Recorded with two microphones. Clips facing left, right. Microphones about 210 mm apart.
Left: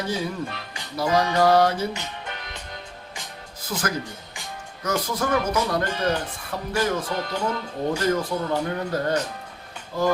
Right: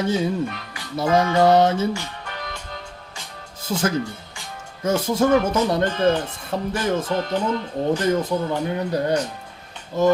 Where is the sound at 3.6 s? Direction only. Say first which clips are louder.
Right 6 dB; 25° right (ahead or behind).